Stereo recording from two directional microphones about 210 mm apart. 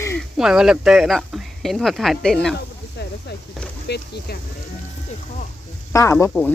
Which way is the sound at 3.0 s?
55° left (ahead or behind).